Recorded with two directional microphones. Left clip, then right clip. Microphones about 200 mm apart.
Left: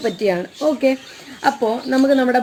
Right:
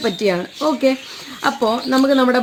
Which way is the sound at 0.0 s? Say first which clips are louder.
Right 1 dB; 45° right (ahead or behind).